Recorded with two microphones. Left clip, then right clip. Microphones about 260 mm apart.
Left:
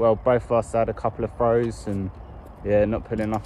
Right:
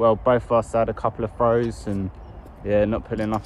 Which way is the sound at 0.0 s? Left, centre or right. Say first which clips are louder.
Right 1 dB; centre.